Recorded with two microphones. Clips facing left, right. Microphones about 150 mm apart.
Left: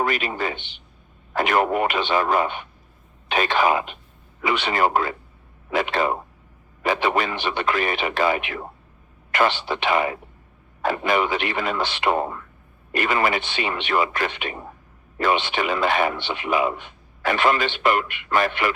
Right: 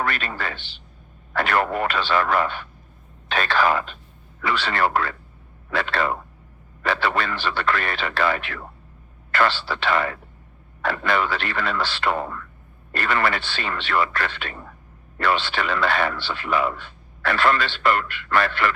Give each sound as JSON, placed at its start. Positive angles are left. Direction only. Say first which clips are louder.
{"t": 0.0, "sound": "speech", "louder": "left 3 dB", "side_deg": 15}